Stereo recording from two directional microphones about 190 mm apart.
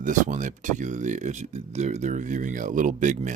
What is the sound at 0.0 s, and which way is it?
Speech, 45° right (ahead or behind).